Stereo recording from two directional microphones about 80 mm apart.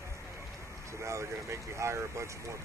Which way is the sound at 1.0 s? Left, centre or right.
Right.